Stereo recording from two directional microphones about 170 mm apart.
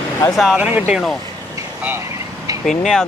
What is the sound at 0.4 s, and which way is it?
Speech, 5° right (ahead or behind).